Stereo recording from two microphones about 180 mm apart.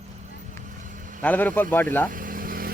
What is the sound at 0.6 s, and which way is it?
Vehicle, 45° right (ahead or behind).